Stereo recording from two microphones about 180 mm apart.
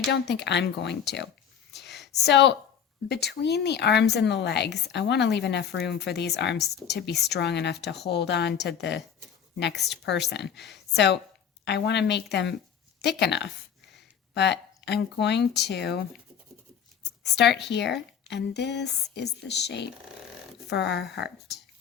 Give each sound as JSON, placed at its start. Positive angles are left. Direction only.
{"t": 0.1, "sound": "speech", "side_deg": 70}
{"t": 1.7, "sound": "a sound", "side_deg": 70}
{"t": 2.2, "sound": "speech", "side_deg": 70}
{"t": 17.0, "sound": "speech", "side_deg": 70}